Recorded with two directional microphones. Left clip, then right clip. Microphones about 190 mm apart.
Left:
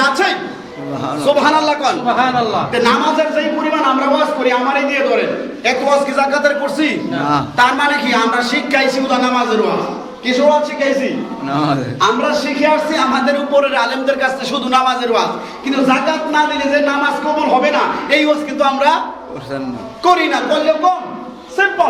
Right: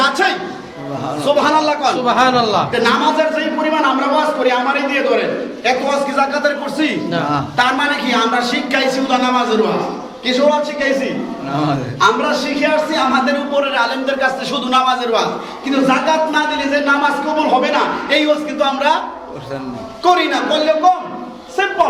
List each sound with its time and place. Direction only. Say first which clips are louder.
0.0 s a sound: left 1 dB; 10° left (ahead or behind)
1.0 s a man's voice: left 2 dB; 15° left (ahead or behind)
2.0 s speech: right 3 dB; 60° right (ahead or behind)
2.7 s a man's voice: left 3 dB; 5° left (ahead or behind)
11.5 s a man's voice: left 2 dB; 25° left (ahead or behind)
11.9 s a man's voice: right 1 dB; centre (ahead or behind)
20.1 s a man's voice: left 1 dB; 10° left (ahead or behind)